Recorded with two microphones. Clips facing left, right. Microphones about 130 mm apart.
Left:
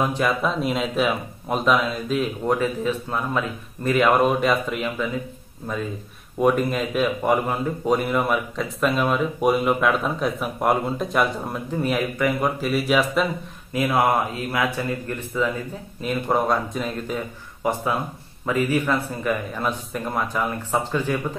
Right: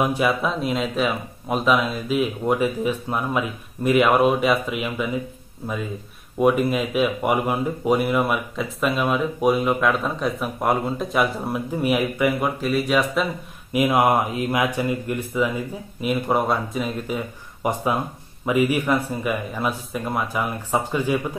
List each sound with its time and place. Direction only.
0.0 s speech: 10° right (ahead or behind)
12.5 s speech: centre (ahead or behind)
13.7 s speech: 15° right (ahead or behind)
17.6 s speech: 20° right (ahead or behind)